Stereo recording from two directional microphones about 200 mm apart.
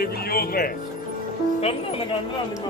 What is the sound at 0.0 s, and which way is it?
Speech, 50° left (ahead or behind).